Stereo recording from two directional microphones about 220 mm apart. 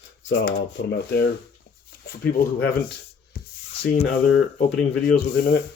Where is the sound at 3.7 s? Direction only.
30° left (ahead or behind).